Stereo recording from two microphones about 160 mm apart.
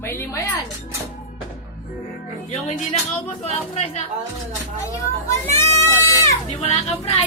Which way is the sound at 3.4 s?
40° left (ahead or behind).